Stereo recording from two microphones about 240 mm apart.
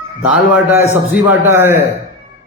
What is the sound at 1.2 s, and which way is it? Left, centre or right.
Speech, centre.